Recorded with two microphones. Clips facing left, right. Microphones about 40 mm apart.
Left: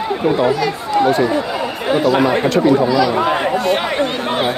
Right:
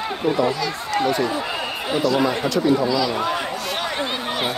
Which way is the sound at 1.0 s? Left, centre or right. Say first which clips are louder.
Left 7 dB; left.